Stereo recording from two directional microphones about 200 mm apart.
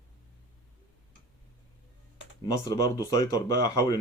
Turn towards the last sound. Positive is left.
turn(degrees=20)  # may be behind; listen again after turning